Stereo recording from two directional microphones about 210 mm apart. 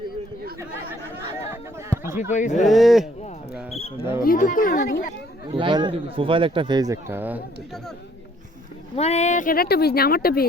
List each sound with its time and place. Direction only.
1.4 s a sound: 10° right (ahead or behind)
2.3 s speech: 35° left (ahead or behind)
2.6 s speech: centre (ahead or behind)
4.2 s speech: 40° left (ahead or behind)
5.5 s speech: 25° right (ahead or behind); by 7.4 s 10° right (ahead or behind)
9.0 s speech: 30° left (ahead or behind)